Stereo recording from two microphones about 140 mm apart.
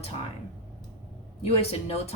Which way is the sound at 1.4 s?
45° left (ahead or behind).